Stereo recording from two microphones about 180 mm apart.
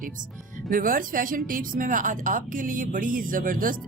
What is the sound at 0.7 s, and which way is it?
A woman's voice, 50° right (ahead or behind).